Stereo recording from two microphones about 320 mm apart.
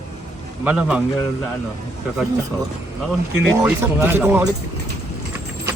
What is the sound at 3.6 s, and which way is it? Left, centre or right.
Speech, centre.